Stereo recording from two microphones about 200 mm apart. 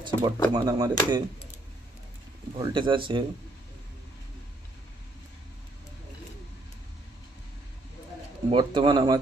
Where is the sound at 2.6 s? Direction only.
25° right (ahead or behind).